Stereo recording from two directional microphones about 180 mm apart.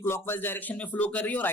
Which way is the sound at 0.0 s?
15° left (ahead or behind).